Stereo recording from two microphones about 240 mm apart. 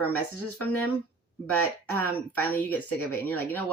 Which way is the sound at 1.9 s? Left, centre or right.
Centre.